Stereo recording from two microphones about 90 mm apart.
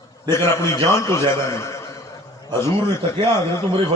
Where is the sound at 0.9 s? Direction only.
35° left (ahead or behind).